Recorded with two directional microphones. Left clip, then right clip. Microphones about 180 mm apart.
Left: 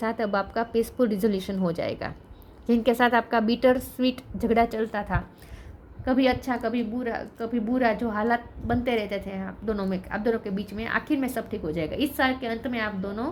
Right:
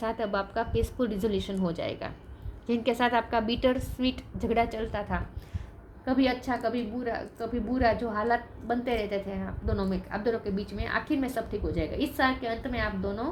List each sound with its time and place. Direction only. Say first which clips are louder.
0.0 s a woman's voice: left 3 dB; 40° left (ahead or behind)